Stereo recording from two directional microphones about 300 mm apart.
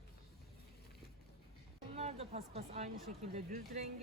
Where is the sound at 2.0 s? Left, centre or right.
Right.